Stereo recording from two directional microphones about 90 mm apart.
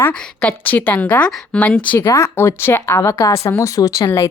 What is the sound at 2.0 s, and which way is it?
A woman's voice, 30° left (ahead or behind).